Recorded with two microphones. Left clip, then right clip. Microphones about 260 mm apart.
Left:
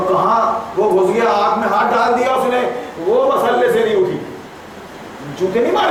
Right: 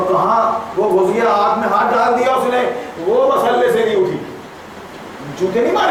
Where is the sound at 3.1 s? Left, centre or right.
Right.